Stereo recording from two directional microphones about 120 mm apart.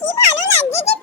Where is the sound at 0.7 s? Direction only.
65° left (ahead or behind).